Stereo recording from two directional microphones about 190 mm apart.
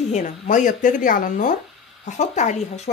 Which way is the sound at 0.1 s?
40° left (ahead or behind).